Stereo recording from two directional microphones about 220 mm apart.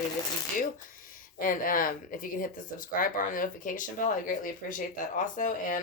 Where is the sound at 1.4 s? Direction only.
40° left (ahead or behind).